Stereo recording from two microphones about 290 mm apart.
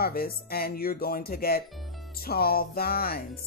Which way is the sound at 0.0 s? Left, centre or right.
Left.